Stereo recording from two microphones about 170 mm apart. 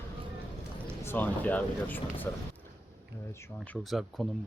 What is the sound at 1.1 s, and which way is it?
Speech, 10° left (ahead or behind).